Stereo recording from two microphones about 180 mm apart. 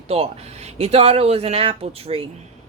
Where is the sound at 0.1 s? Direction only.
35° right (ahead or behind).